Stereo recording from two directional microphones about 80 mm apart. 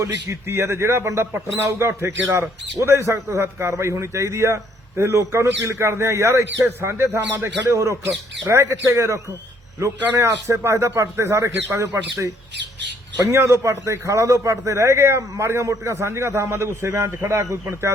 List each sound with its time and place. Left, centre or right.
0.0 s speech: right
10.4 s speech: right